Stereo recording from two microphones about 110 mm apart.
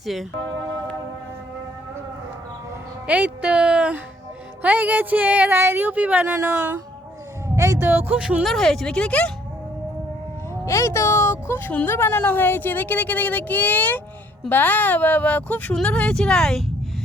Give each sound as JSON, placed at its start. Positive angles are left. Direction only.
{"t": 0.0, "sound": "speech", "side_deg": 0}
{"t": 3.1, "sound": "speech", "side_deg": -10}
{"t": 7.5, "sound": "a sound", "side_deg": -30}
{"t": 8.1, "sound": "speech", "side_deg": -10}
{"t": 8.5, "sound": "speech", "side_deg": 5}
{"t": 10.7, "sound": "speech", "side_deg": 25}